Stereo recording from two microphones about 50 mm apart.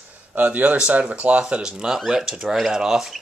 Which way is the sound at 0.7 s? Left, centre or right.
Right.